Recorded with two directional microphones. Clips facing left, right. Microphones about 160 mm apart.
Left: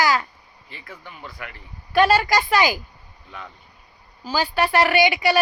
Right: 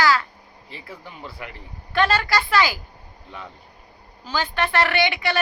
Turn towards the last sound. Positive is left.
turn(degrees=10)  # may be behind; listen again after turning